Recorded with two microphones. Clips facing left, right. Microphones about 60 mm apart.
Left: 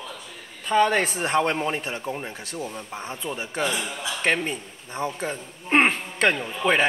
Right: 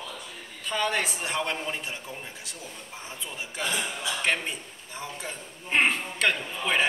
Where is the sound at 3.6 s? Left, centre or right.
Centre.